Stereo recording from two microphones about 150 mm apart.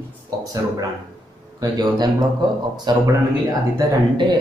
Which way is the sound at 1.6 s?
25° right (ahead or behind).